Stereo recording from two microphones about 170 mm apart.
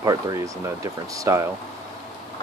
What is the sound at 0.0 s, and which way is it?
Speech, 20° right (ahead or behind).